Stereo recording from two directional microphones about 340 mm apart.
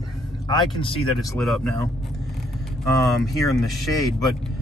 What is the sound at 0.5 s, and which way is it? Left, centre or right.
Speech, centre.